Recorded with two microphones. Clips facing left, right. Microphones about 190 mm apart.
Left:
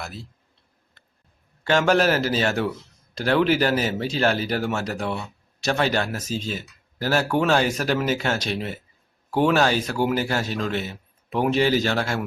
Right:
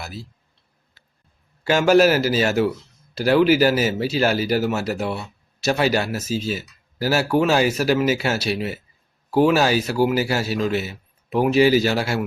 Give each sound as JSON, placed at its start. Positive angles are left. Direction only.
{"t": 0.0, "sound": "speech", "side_deg": -5}
{"t": 1.0, "sound": "a sound", "side_deg": -5}
{"t": 1.6, "sound": "speech", "side_deg": -5}